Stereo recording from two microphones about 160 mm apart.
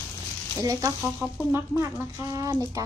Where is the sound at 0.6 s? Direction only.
20° right (ahead or behind).